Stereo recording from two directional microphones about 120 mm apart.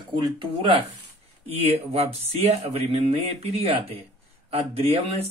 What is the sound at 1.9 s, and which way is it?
Speech, 60° right (ahead or behind).